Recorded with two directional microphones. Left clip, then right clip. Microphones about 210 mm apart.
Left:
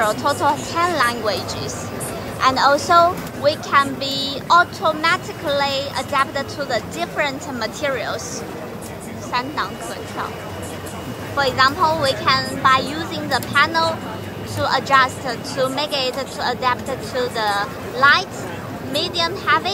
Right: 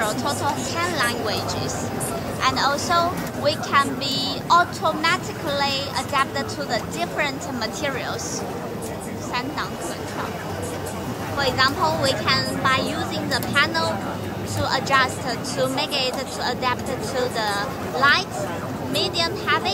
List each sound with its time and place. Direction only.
0.0 s a woman's voice: 5° right (ahead or behind)
2.4 s a woman's voice: 5° right (ahead or behind)
11.3 s a woman's voice: 5° right (ahead or behind)